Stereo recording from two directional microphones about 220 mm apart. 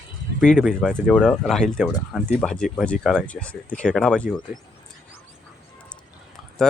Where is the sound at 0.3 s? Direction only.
Centre (ahead or behind).